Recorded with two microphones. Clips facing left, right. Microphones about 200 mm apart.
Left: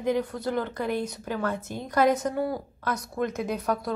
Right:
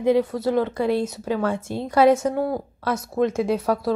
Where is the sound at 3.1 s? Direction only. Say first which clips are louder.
Right 9 dB; 90° right.